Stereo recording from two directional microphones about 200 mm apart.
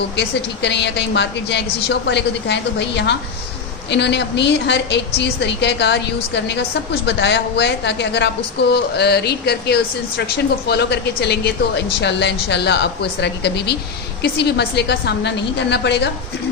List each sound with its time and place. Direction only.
0.2 s a woman's voice: 60° left (ahead or behind)